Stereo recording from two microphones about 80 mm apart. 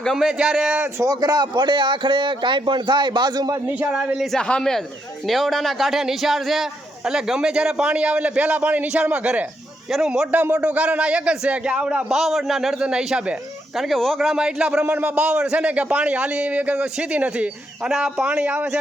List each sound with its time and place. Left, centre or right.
0.0 s a man's voice: centre
0.9 s a man's voice: right
3.7 s a man's voice: centre
4.3 s a man's voice: centre
12.1 s a man's voice: centre
13.7 s a man's voice: centre